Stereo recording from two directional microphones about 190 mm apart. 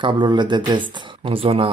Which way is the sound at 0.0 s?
25° right (ahead or behind).